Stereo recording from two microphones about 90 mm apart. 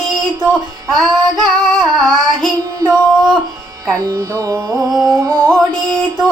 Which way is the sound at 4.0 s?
35° right (ahead or behind).